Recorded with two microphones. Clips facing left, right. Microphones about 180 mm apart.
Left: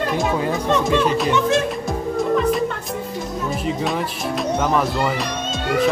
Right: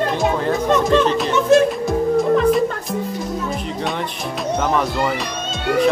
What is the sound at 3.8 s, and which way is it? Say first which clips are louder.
Speech: left 1 dB; centre (ahead or behind).